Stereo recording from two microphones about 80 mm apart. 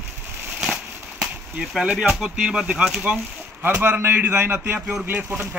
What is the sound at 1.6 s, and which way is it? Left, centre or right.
Speech, centre.